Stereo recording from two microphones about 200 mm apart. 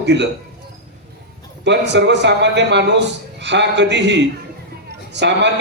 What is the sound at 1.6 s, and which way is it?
A man's voice, 60° right (ahead or behind).